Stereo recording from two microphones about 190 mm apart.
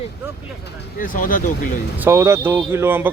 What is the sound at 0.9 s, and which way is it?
Speech, 45° left (ahead or behind).